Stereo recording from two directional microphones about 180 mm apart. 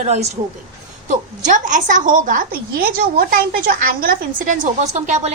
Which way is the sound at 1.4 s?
45° right (ahead or behind).